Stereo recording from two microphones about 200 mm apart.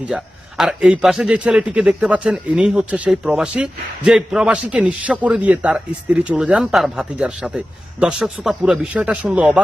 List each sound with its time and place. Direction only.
0.0 s a man's voice: 5° right (ahead or behind)